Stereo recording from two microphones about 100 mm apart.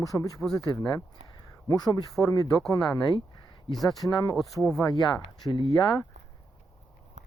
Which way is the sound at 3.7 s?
Centre (ahead or behind).